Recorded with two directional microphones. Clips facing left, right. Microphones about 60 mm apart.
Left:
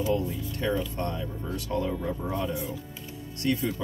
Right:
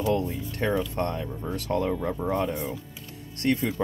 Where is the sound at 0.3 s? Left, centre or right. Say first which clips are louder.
Right 2 dB; right.